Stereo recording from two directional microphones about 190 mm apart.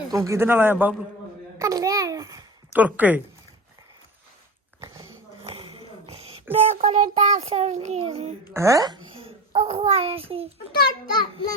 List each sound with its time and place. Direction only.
0.1 s a man's voice: 15° right (ahead or behind)
1.5 s babbling: 15° right (ahead or behind)
2.8 s a man's voice: 10° right (ahead or behind)
5.4 s a sound: 30° right (ahead or behind)
6.5 s a child's voice: 40° right (ahead or behind)
8.5 s a man's voice: 15° right (ahead or behind)
9.1 s a child's voice: 30° right (ahead or behind)
10.8 s a child's voice: 20° left (ahead or behind)